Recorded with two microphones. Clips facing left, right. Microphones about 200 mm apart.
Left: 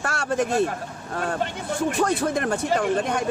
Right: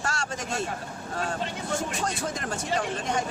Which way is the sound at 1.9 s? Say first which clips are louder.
Left 8 dB; 60° left (ahead or behind).